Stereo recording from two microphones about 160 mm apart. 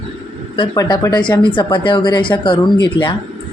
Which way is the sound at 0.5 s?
25° left (ahead or behind).